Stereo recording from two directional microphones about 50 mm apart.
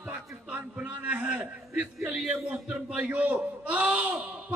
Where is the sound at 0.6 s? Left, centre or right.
Right.